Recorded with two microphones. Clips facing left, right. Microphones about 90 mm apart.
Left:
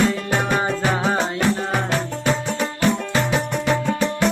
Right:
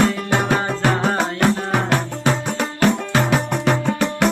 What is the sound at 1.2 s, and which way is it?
Music, 55° right (ahead or behind).